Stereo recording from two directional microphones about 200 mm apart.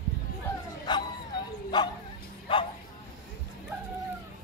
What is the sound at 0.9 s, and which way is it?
Bow-wow, 20° left (ahead or behind).